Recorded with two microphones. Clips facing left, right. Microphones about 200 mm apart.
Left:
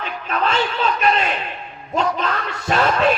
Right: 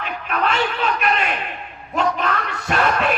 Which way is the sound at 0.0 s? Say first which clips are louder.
Even; 30° left (ahead or behind).